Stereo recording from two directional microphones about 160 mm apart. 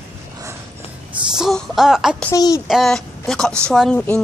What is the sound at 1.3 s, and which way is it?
Speech, centre (ahead or behind).